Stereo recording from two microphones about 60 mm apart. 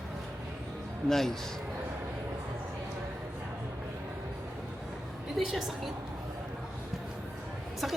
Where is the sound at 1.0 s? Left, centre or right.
Centre.